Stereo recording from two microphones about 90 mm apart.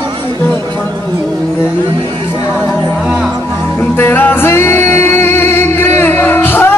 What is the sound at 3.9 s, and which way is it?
Music, 25° left (ahead or behind).